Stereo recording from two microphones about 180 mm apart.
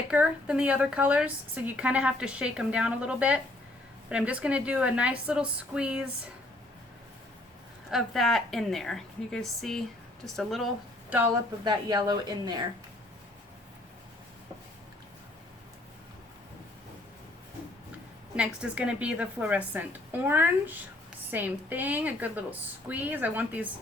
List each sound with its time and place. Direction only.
0.1 s a woman's voice: 5° right (ahead or behind)
7.9 s a woman's voice: centre (ahead or behind)
11.6 s speech: 25° right (ahead or behind)
18.3 s a woman's voice: 5° right (ahead or behind)